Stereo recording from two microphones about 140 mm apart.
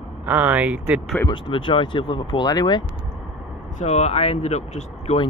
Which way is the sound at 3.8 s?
50° left (ahead or behind).